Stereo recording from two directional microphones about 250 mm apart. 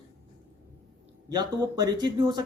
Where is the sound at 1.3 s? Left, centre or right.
Centre.